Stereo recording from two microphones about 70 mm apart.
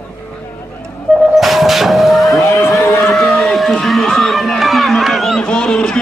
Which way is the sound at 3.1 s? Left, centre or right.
Centre.